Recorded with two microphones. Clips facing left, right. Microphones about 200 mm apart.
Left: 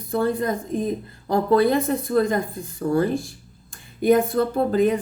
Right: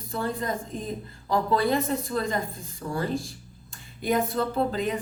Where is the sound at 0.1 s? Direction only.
50° left (ahead or behind).